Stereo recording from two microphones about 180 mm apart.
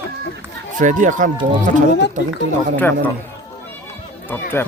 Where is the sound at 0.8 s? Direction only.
45° right (ahead or behind).